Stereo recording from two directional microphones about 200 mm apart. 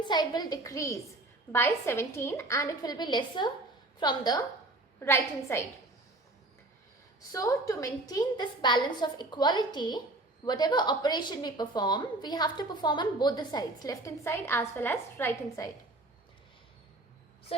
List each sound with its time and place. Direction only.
0.0 s a woman's voice: 20° left (ahead or behind)
7.3 s a woman's voice: 15° left (ahead or behind)